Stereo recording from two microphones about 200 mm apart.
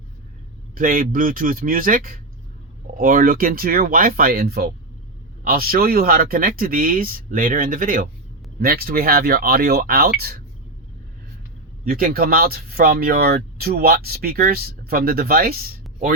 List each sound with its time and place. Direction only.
0.8 s speech: 45° right (ahead or behind)
11.9 s speech: 45° right (ahead or behind)